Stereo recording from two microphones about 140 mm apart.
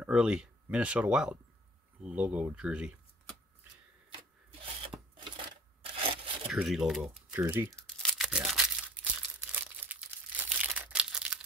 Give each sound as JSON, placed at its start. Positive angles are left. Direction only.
{"t": 0.0, "sound": "speech", "side_deg": -5}
{"t": 4.1, "sound": "rub", "side_deg": -45}
{"t": 5.2, "sound": "coin", "side_deg": -40}
{"t": 6.5, "sound": "speech", "side_deg": -5}
{"t": 7.2, "sound": "typing", "side_deg": -5}
{"t": 7.4, "sound": "speech", "side_deg": -15}
{"t": 7.8, "sound": "crumpling", "side_deg": 5}